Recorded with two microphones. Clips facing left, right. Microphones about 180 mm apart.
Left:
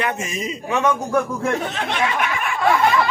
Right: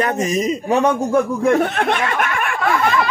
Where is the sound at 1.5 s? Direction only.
55° right (ahead or behind).